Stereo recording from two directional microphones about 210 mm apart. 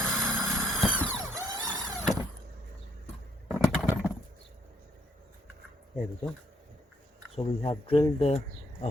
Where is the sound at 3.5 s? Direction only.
5° right (ahead or behind).